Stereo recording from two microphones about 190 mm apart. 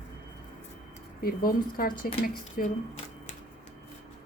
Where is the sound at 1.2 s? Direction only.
50° left (ahead or behind).